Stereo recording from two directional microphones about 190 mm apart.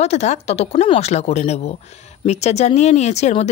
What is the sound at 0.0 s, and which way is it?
Speech, 35° left (ahead or behind).